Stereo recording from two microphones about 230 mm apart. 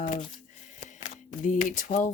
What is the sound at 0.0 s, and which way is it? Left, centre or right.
Squish, left.